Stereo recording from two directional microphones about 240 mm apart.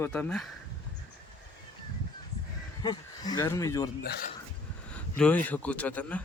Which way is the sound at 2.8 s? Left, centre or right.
Centre.